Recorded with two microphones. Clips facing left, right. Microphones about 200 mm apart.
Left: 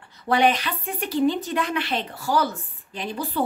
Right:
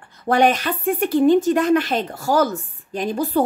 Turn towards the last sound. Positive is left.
turn(degrees=-45)  # may be behind; listen again after turning